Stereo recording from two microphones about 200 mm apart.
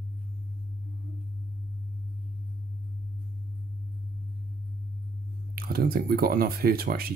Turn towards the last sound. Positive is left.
turn(degrees=-50)  # may be behind; listen again after turning